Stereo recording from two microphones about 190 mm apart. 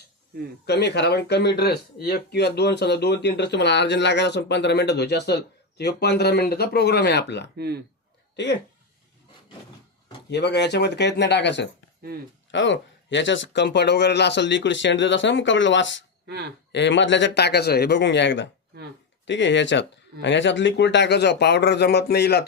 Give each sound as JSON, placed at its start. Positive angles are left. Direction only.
{"t": 0.6, "sound": "speech", "side_deg": 60}
{"t": 7.5, "sound": "speech", "side_deg": -55}
{"t": 10.2, "sound": "speech", "side_deg": 60}